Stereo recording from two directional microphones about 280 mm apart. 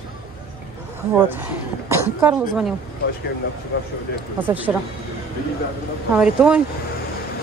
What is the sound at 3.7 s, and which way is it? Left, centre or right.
Speech, left.